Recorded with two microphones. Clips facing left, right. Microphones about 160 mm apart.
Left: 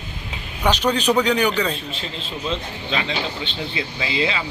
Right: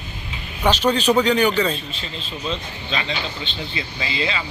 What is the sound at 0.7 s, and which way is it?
Speech, 10° left (ahead or behind).